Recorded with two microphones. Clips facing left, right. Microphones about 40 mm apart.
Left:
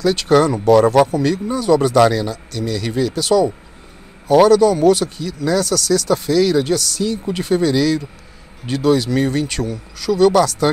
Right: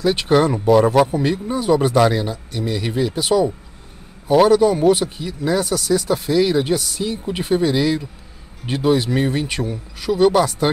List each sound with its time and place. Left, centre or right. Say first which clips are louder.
0.0 s speech: left 2 dB; centre